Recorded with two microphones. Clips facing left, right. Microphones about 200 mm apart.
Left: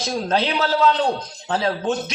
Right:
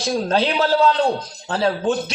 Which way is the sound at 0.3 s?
30° right (ahead or behind).